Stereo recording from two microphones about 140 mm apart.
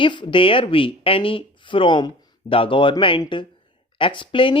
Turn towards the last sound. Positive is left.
turn(degrees=35)  # may be behind; listen again after turning